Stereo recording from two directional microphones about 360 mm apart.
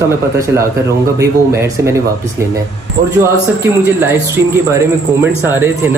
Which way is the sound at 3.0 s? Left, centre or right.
Right.